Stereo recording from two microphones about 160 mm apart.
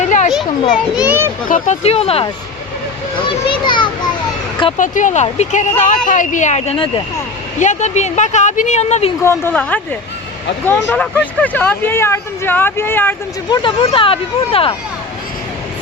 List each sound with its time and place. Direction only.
0.0 s children playing: 50° left (ahead or behind)
0.9 s a child's voice: 10° right (ahead or behind)
1.5 s speech: 55° left (ahead or behind)
3.2 s a child's voice: 30° left (ahead or behind)
4.8 s speech: 55° left (ahead or behind); by 7.0 s 35° left (ahead or behind)
7.6 s speech: 50° left (ahead or behind)
9.2 s speech: 15° left (ahead or behind)
13.5 s speech: 30° left (ahead or behind)